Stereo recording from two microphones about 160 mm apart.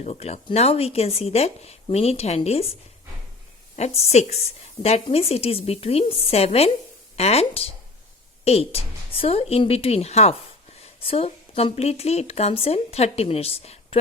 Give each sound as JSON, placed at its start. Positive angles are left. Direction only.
{"t": 0.0, "sound": "a woman's voice", "side_deg": 40}
{"t": 3.8, "sound": "a woman's voice", "side_deg": 40}